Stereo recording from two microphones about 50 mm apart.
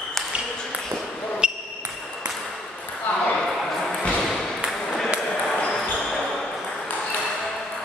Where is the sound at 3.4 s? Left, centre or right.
Centre.